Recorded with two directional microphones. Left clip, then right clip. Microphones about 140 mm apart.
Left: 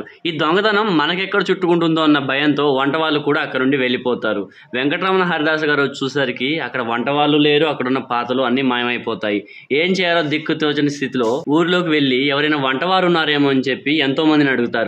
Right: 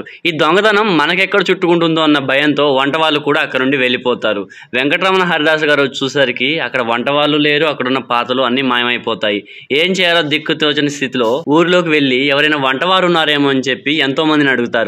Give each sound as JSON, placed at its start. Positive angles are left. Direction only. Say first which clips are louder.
{"t": 0.4, "sound": "a man's voice", "louder": "right 5 dB", "side_deg": -25}